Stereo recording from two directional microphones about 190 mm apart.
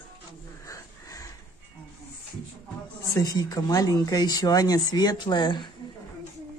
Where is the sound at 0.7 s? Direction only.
15° left (ahead or behind).